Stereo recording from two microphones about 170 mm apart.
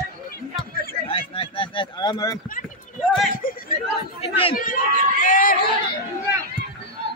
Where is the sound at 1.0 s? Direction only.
35° left (ahead or behind).